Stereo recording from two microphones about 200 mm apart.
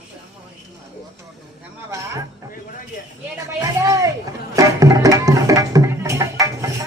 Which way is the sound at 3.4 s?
15° right (ahead or behind).